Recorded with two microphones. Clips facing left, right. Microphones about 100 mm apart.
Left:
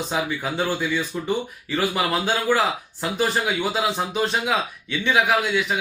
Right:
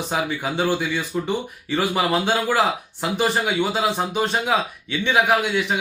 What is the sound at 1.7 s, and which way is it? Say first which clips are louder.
Speech: right 2 dB; 20° right (ahead or behind).